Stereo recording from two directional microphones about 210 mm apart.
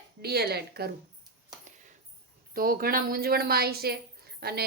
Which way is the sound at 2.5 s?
45° right (ahead or behind).